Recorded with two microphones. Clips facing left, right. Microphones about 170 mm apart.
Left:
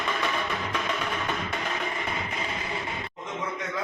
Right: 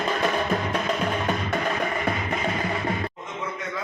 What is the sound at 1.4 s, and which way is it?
Music, 55° right (ahead or behind).